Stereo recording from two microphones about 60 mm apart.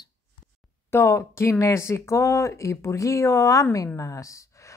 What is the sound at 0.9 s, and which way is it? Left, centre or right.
A woman's voice, left.